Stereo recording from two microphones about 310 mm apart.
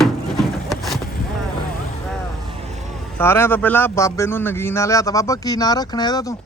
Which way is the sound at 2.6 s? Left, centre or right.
Right.